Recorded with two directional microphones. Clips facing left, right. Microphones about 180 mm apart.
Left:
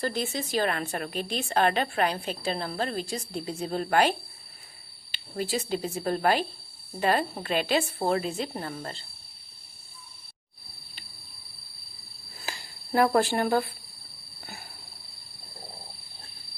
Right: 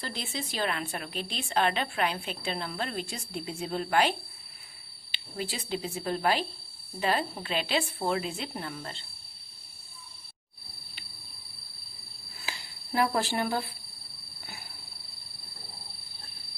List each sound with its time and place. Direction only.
0.0 s a woman's voice: 45° left (ahead or behind)
5.1 s a woman's voice: 45° left (ahead or behind)
12.5 s speech: 45° left (ahead or behind)